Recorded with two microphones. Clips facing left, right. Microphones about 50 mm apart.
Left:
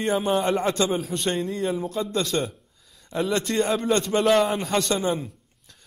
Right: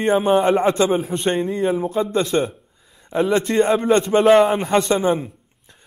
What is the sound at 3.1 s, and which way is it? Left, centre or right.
Speech, centre.